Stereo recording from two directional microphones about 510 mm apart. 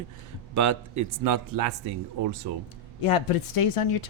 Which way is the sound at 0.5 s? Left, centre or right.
Right.